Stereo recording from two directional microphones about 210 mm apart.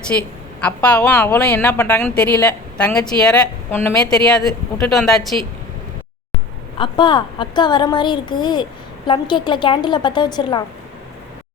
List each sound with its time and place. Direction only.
0.1 s a woman's voice: 10° left (ahead or behind)
6.7 s a woman's voice: 20° left (ahead or behind)